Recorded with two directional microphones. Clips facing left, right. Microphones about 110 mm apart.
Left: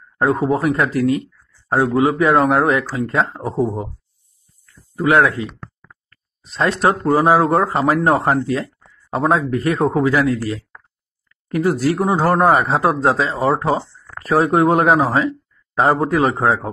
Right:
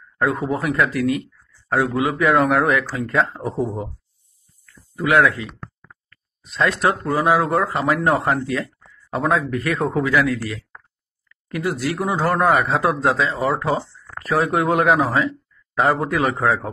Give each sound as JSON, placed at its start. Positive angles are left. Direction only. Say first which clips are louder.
{"t": 0.2, "sound": "speech", "louder": "left 5 dB", "side_deg": 35}
{"t": 4.9, "sound": "speech", "louder": "left 2 dB", "side_deg": 30}